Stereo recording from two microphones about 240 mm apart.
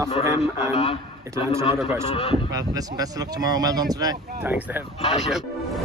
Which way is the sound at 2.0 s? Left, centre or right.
Left.